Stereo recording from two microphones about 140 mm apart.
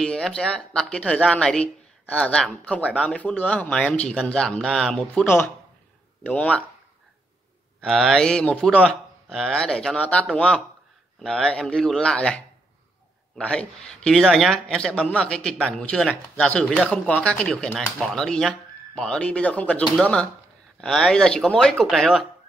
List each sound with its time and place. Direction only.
0.0 s speech: 5° left (ahead or behind)
5.2 s speech: 15° left (ahead or behind)
7.8 s a man's voice: centre (ahead or behind)
13.4 s speech: 5° left (ahead or behind)
20.8 s a man's voice: 5° left (ahead or behind)